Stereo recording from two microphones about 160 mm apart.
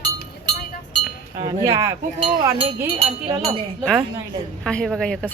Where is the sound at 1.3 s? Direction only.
20° right (ahead or behind).